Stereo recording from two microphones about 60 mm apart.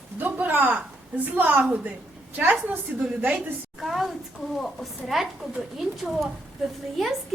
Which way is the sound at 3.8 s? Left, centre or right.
Centre.